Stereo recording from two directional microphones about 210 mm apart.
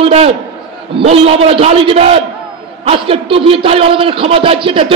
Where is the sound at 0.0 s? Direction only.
30° right (ahead or behind).